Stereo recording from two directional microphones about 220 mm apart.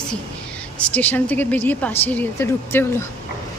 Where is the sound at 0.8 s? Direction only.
5° left (ahead or behind).